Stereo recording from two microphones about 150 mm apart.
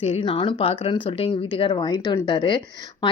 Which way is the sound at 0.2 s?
30° left (ahead or behind).